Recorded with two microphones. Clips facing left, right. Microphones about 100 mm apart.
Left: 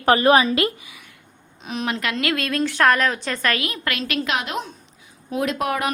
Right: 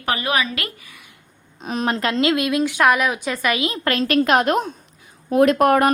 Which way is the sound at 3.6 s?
30° right (ahead or behind).